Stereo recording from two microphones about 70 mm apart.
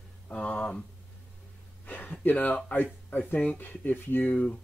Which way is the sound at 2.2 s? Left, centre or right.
Left.